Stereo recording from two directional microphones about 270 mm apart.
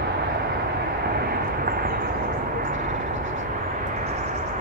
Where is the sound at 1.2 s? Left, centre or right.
Right.